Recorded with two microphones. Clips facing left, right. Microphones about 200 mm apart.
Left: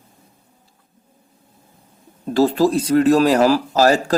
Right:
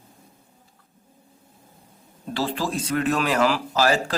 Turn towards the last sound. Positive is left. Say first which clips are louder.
# left 6 dB
turn(degrees=40)  # may be behind; listen again after turning